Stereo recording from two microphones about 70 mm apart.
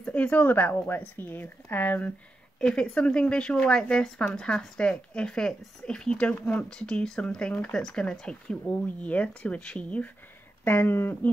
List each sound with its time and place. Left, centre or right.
0.0 s a woman's voice: centre
2.6 s speech: centre
6.3 s a woman's voice: left
6.7 s speech: centre
10.6 s speech: left